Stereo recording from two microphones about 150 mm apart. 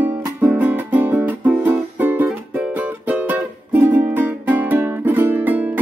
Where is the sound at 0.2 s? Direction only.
15° right (ahead or behind).